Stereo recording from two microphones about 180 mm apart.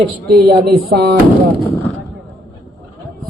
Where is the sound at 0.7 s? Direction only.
60° right (ahead or behind).